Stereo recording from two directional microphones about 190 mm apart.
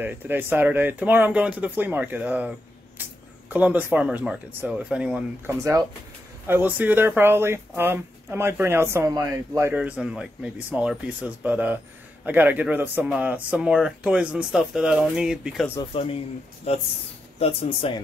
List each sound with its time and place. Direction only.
0.0 s speech: 10° right (ahead or behind)
15.8 s speech: 30° left (ahead or behind)